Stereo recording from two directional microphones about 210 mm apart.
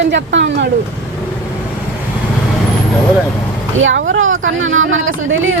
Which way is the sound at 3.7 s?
65° right (ahead or behind).